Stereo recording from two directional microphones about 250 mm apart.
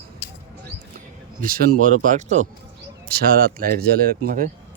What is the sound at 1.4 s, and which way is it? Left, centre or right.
Speech, right.